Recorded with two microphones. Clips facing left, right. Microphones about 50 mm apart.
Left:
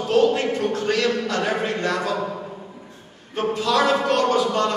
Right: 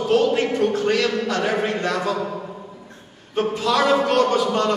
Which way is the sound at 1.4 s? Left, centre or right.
Centre.